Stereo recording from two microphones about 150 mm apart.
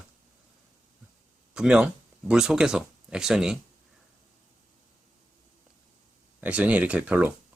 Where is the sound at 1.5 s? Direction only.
5° right (ahead or behind).